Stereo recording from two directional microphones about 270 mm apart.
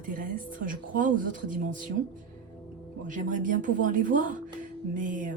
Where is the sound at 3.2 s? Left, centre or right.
Right.